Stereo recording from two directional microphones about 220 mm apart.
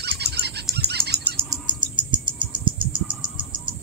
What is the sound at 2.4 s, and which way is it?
Cricket, 20° right (ahead or behind).